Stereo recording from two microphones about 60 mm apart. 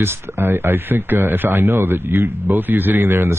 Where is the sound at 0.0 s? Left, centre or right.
Right.